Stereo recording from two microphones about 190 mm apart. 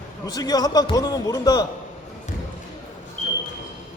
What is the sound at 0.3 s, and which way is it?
A man's voice, 20° left (ahead or behind).